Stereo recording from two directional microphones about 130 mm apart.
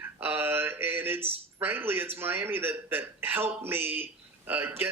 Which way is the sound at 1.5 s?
15° right (ahead or behind).